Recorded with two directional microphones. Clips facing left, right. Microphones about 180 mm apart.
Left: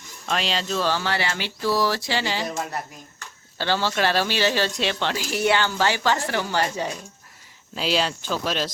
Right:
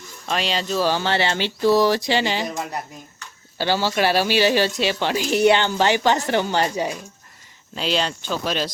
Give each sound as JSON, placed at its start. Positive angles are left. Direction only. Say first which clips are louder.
{"t": 0.3, "sound": "speech", "louder": "right 2 dB", "side_deg": 0}
{"t": 0.9, "sound": "speech", "louder": "right 4 dB", "side_deg": -25}
{"t": 7.8, "sound": "speech", "louder": "right 1 dB", "side_deg": 5}